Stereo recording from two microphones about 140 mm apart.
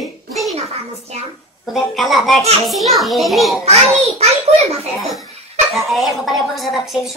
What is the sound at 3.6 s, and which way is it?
A child's voice, 50° right (ahead or behind).